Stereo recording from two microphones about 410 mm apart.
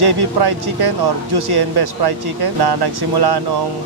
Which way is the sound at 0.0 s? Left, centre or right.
Right.